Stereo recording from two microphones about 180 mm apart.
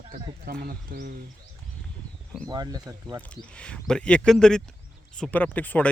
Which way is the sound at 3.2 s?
5° left (ahead or behind).